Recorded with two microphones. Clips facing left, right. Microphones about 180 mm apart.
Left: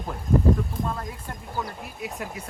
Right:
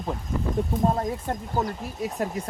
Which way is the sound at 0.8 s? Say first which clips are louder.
Right 8 dB; 40° right (ahead or behind).